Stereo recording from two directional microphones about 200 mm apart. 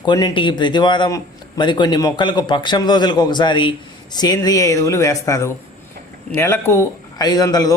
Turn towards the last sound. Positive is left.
turn(degrees=20)  # may be behind; listen again after turning